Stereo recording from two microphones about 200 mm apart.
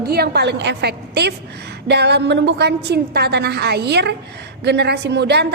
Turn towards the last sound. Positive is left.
turn(degrees=-55)  # may be behind; listen again after turning